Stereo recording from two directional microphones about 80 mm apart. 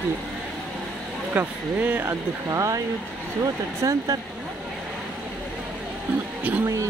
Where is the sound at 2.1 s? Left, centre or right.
Right.